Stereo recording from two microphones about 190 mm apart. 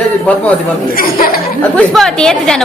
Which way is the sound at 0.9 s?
50° left (ahead or behind).